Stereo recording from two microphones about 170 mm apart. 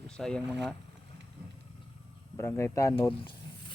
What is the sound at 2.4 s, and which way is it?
Speech, 15° left (ahead or behind).